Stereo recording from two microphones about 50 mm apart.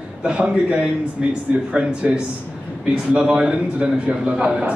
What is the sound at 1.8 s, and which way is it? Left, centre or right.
Speech, right.